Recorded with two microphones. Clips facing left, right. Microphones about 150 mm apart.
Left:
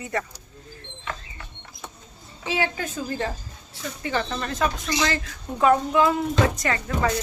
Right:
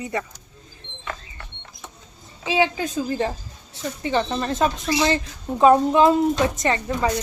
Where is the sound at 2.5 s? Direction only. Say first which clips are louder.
Right 6 dB; 20° right (ahead or behind).